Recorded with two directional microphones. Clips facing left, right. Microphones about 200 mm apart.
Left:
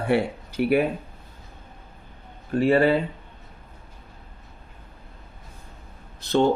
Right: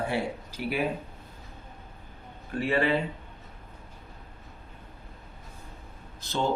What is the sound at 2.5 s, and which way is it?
Speech, 40° left (ahead or behind).